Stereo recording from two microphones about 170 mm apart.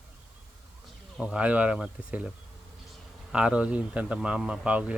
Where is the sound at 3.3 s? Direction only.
5° right (ahead or behind).